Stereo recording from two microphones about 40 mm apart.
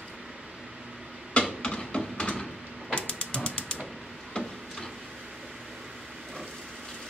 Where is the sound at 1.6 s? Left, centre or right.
Left.